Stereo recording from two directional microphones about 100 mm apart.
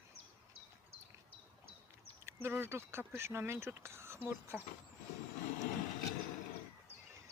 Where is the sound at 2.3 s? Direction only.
25° right (ahead or behind).